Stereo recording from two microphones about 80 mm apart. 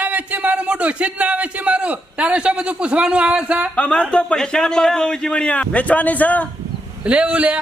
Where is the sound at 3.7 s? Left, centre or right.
Centre.